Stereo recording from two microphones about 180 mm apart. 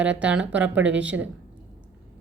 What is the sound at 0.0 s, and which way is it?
A woman's voice, 5° right (ahead or behind).